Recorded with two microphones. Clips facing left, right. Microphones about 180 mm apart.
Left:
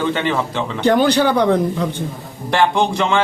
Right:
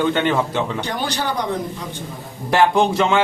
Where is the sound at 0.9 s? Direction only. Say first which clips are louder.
Left 10 dB; 60° left (ahead or behind).